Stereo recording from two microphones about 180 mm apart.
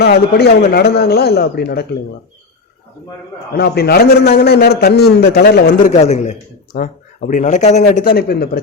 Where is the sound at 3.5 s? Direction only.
60° left (ahead or behind).